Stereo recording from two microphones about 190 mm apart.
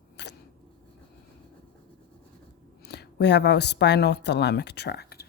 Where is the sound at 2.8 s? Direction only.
60° left (ahead or behind).